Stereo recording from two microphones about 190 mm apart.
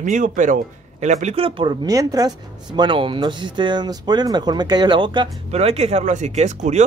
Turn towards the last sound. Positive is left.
turn(degrees=-35)  # may be behind; listen again after turning